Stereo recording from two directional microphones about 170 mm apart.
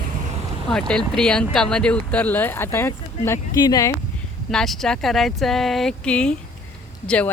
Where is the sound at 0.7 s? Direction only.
5° left (ahead or behind); by 3.9 s 25° left (ahead or behind).